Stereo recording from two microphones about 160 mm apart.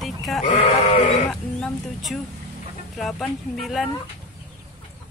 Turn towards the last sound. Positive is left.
turn(degrees=0)  # may be behind; listen again after turning